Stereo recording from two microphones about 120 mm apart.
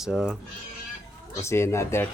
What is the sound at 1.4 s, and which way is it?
Speech, 20° left (ahead or behind).